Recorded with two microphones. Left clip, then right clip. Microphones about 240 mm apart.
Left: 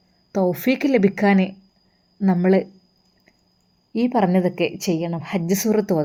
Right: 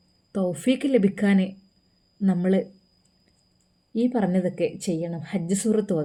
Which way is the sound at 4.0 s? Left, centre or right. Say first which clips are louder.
Left 5 dB; centre.